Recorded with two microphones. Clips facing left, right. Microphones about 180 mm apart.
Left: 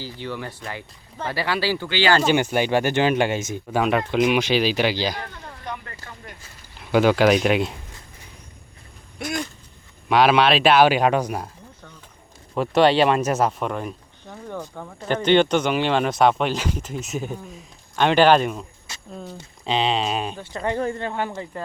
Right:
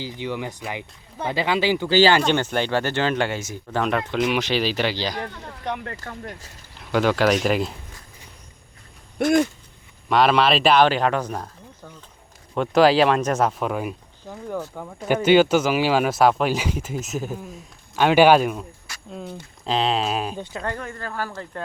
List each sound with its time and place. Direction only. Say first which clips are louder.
0.0 s speech: right 3 dB; 15° right (ahead or behind)
2.2 s speech: left 2 dB; 10° left (ahead or behind)
5.6 s speech: right 6 dB; 65° right (ahead or behind)
6.9 s speech: left 3 dB; 5° left (ahead or behind)
9.1 s a sound: right 11 dB; 50° right (ahead or behind)
10.1 s speech: left 1 dB; centre (ahead or behind)
12.5 s speech: right 1 dB; centre (ahead or behind)
18.9 s a sound: left 1 dB; 20° left (ahead or behind)
19.6 s speech: even; centre (ahead or behind)
20.7 s speech: left 6 dB; 25° left (ahead or behind)
21.5 s speech: right 1 dB; 5° left (ahead or behind)